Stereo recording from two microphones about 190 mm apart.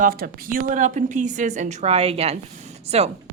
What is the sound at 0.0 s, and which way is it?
A woman's voice, 50° right (ahead or behind).